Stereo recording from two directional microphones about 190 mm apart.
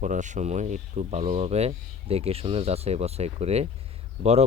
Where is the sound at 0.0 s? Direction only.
40° right (ahead or behind).